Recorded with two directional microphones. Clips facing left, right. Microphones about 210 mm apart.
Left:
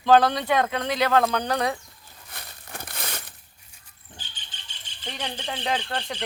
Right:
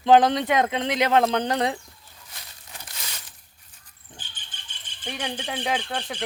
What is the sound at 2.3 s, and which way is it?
Crumpling, 55° left (ahead or behind).